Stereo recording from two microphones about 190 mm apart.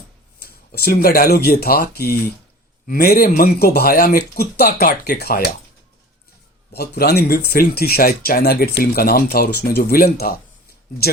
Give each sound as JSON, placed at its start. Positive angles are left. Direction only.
{"t": 0.3, "sound": "speech", "side_deg": 55}
{"t": 6.7, "sound": "speech", "side_deg": 55}